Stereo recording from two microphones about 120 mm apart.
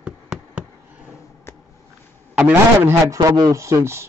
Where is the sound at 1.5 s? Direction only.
20° left (ahead or behind).